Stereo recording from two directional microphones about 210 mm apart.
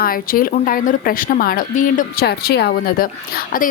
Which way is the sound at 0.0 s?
45° left (ahead or behind).